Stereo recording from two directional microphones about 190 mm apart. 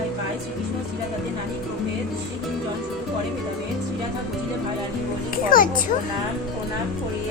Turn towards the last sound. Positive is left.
turn(degrees=50)  # may be behind; listen again after turning